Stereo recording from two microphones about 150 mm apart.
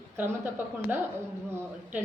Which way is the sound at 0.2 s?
15° right (ahead or behind).